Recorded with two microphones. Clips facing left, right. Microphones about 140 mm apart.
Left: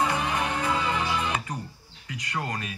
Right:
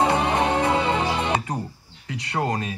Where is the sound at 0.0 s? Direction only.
30° right (ahead or behind).